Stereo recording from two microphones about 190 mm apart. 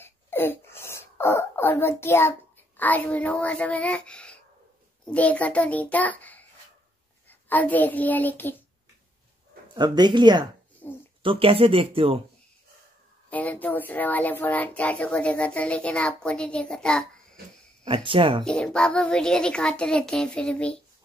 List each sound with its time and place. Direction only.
0.0 s throat clearing: 10° left (ahead or behind)
2.8 s a child's voice: 10° left (ahead or behind)
9.8 s speech: 20° right (ahead or behind)
10.8 s speech: 10° left (ahead or behind)
11.2 s speech: 30° right (ahead or behind)
13.3 s speech: 10° left (ahead or behind)
17.8 s speech: 30° right (ahead or behind)
18.4 s a child's voice: 5° left (ahead or behind)